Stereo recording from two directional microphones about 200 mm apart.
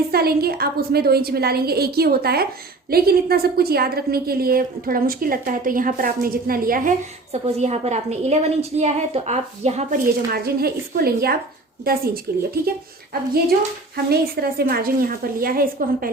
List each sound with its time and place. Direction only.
0.1 s a woman's voice: 50° right (ahead or behind)
7.4 s a woman's voice: 30° right (ahead or behind)
10.3 s a woman's voice: 50° right (ahead or behind)
13.9 s a woman's voice: 50° right (ahead or behind)